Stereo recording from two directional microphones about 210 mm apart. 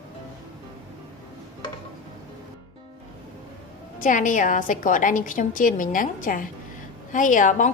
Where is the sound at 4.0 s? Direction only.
40° left (ahead or behind).